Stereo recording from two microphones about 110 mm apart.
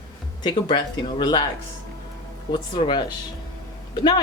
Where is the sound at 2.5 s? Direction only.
40° left (ahead or behind).